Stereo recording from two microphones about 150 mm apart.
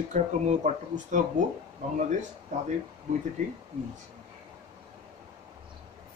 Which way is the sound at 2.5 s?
50° right (ahead or behind).